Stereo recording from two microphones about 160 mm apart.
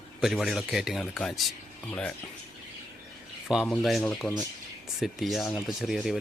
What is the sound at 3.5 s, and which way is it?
Speech, centre (ahead or behind).